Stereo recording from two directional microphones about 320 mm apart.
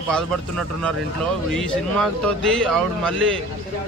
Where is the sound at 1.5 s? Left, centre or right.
Centre.